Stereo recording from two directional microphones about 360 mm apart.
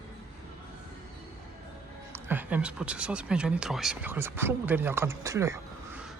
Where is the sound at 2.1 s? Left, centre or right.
Centre.